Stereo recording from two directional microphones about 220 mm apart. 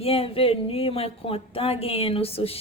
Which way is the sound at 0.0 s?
25° left (ahead or behind).